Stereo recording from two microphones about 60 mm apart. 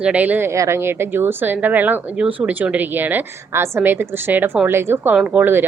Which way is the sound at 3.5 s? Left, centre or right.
Right.